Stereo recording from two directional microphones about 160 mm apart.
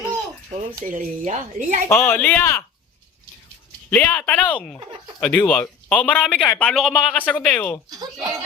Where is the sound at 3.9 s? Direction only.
10° left (ahead or behind).